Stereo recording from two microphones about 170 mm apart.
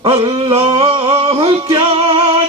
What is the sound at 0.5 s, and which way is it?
Humming, 30° right (ahead or behind).